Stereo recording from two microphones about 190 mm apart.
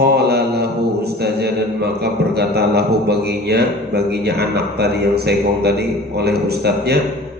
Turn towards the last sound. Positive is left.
turn(degrees=-60)  # may be behind; listen again after turning